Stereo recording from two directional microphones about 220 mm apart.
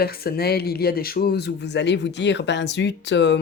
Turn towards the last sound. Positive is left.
turn(degrees=50)  # may be behind; listen again after turning